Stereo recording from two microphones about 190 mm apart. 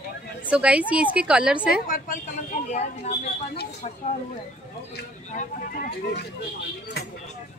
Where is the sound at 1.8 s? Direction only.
45° left (ahead or behind).